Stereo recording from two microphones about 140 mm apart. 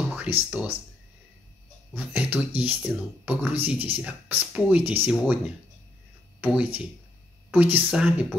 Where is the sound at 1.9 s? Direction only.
10° right (ahead or behind).